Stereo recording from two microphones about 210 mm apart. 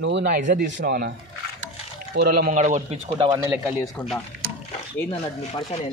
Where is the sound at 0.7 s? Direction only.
55° right (ahead or behind).